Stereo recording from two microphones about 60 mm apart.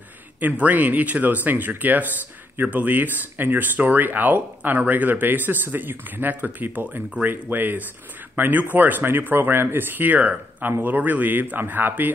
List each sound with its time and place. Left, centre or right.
0.4 s speech: right